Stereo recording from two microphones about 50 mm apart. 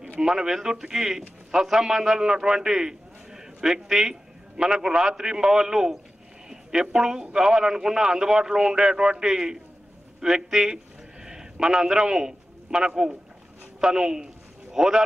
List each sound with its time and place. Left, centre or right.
0.2 s a man's voice: centre